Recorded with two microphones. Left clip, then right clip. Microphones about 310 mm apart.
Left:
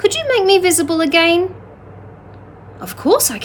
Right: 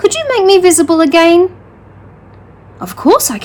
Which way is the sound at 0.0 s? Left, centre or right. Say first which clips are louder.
Right 4 dB; centre.